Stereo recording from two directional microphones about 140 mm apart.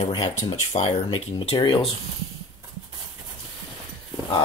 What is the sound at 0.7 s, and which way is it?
Speech, 45° left (ahead or behind).